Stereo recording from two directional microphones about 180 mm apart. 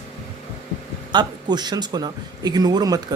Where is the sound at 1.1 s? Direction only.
25° right (ahead or behind).